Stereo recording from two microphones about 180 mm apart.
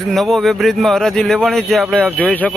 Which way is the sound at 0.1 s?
Centre (ahead or behind).